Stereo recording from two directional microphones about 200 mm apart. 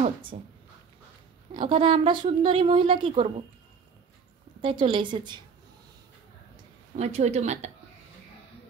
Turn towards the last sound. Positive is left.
turn(degrees=-35)  # may be behind; listen again after turning